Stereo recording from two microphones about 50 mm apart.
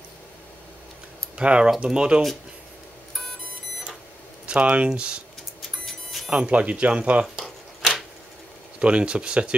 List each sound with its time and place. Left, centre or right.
1.3 s speech: right
4.5 s speech: right
5.6 s a sound: centre
6.3 s speech: right
7.3 s a sound: centre
8.7 s speech: right